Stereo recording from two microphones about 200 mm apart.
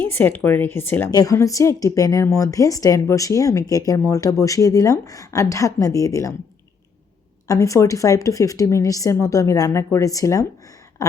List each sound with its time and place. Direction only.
0.0 s speech: 10° left (ahead or behind)
7.4 s speech: 15° left (ahead or behind)